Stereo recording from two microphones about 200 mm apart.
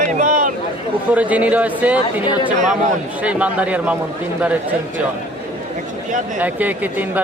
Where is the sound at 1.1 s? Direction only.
5° right (ahead or behind).